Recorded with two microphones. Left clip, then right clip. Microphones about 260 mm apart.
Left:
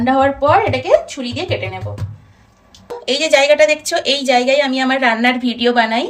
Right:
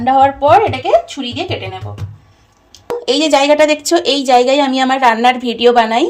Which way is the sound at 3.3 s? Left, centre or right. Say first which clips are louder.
Even; centre.